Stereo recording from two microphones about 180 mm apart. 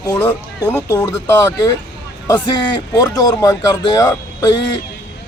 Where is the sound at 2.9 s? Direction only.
20° left (ahead or behind).